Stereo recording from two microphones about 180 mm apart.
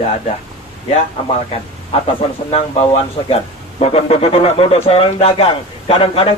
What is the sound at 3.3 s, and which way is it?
Speech, 35° left (ahead or behind).